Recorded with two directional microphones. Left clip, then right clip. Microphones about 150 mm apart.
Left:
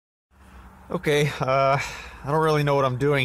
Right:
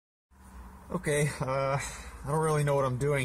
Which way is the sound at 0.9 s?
25° left (ahead or behind).